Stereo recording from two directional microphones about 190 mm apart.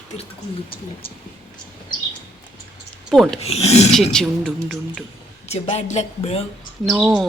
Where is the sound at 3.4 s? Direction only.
35° left (ahead or behind).